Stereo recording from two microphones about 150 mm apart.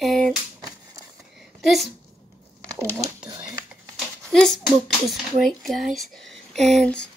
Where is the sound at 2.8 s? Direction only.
20° right (ahead or behind).